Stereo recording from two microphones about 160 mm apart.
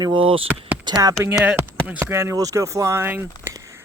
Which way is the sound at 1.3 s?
10° right (ahead or behind).